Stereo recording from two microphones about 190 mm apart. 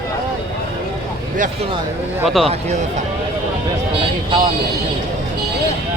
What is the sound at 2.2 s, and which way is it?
Speech, centre (ahead or behind).